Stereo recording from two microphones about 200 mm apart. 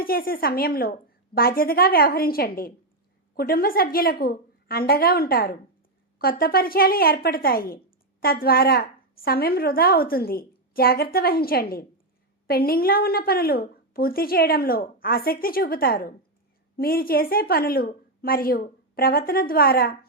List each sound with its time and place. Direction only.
0.0 s a woman's voice: 50° left (ahead or behind)